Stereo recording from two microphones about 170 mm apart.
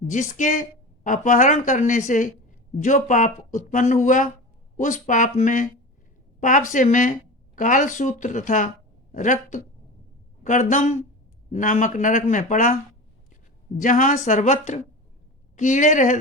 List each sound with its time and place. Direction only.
0.1 s speech: 45° left (ahead or behind)
13.7 s speech: 50° left (ahead or behind)